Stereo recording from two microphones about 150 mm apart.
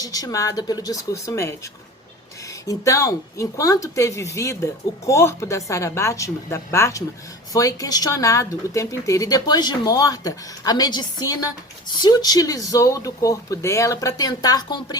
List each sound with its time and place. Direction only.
0.0 s speech: 25° left (ahead or behind)
2.6 s speech: 20° left (ahead or behind)